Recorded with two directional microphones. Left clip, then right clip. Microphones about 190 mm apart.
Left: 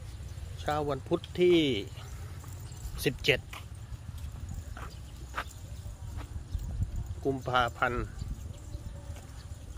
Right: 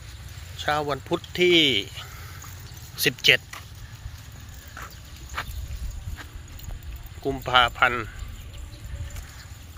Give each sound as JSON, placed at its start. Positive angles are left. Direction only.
{"t": 0.6, "sound": "speech", "side_deg": 0}
{"t": 5.4, "sound": "a sound", "side_deg": -15}
{"t": 7.3, "sound": "speech", "side_deg": 0}